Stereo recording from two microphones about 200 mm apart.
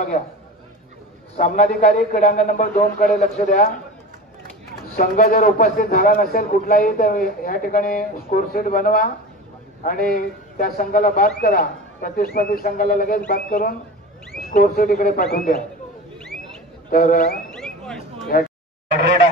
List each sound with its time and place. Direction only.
1.3 s a man's voice: 35° left (ahead or behind)
4.9 s a man's voice: 45° left (ahead or behind)
16.9 s a man's voice: 45° left (ahead or behind)
17.6 s a sound: centre (ahead or behind)
18.3 s a man's voice: 45° left (ahead or behind)